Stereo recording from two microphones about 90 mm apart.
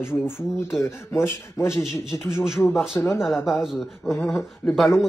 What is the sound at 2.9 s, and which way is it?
Speech, 30° left (ahead or behind).